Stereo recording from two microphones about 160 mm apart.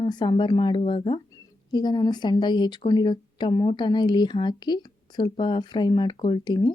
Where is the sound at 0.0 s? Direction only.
30° left (ahead or behind).